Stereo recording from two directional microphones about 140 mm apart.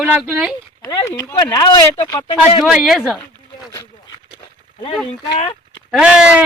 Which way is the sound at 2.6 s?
Centre (ahead or behind).